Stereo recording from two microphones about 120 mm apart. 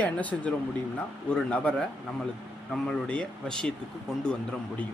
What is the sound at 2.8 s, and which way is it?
Speech, 5° left (ahead or behind).